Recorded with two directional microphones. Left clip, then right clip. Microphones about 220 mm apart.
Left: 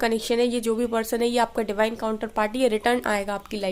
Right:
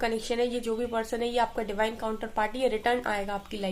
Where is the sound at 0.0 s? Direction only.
50° left (ahead or behind).